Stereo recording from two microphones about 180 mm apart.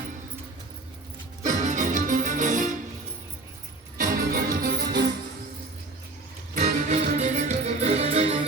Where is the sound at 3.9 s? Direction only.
55° right (ahead or behind).